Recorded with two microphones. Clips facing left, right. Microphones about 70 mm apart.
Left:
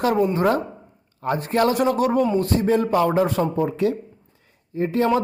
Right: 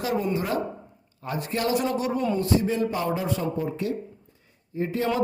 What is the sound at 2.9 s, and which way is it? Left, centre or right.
Speech, left.